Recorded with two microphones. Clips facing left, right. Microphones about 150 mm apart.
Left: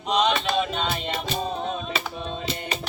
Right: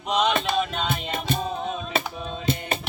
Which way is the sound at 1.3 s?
55° right (ahead or behind).